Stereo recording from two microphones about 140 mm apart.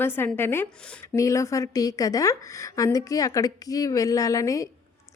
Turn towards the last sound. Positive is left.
turn(degrees=25)  # may be behind; listen again after turning